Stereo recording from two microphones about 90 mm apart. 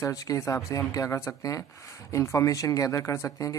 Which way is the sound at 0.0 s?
40° left (ahead or behind).